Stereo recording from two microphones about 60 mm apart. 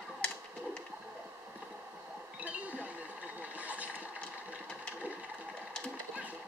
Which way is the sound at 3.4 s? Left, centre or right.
Right.